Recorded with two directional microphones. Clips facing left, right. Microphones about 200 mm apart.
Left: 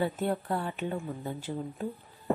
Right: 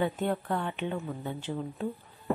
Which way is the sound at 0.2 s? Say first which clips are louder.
Even; 35° left (ahead or behind).